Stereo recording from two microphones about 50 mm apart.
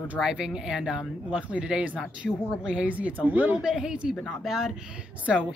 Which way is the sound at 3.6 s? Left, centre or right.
Centre.